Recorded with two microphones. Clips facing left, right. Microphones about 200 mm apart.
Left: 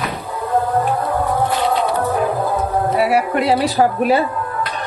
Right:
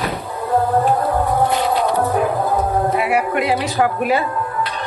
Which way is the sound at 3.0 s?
35° left (ahead or behind).